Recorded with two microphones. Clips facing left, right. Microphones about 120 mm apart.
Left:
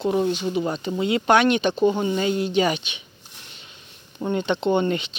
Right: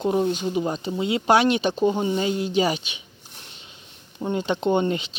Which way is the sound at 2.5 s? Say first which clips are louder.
Left 1 dB; 35° right (ahead or behind).